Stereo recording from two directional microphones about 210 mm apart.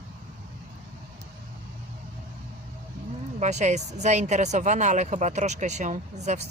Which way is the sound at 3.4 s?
35° right (ahead or behind).